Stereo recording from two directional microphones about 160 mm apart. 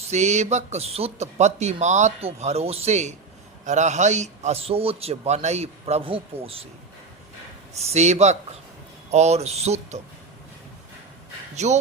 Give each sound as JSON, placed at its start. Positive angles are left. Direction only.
{"t": 0.1, "sound": "a man's voice", "side_deg": -45}
{"t": 7.8, "sound": "speech", "side_deg": -45}
{"t": 11.5, "sound": "speech", "side_deg": -45}